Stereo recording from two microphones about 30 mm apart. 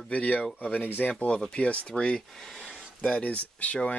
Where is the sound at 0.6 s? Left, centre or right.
Left.